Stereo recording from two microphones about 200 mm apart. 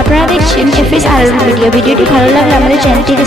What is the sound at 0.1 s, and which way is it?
Speech, centre (ahead or behind).